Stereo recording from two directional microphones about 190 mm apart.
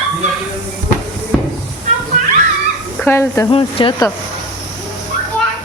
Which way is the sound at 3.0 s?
15° left (ahead or behind).